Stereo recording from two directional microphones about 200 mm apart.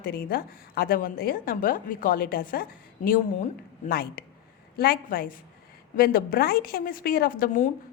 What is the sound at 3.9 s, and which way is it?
A woman's voice, 50° left (ahead or behind).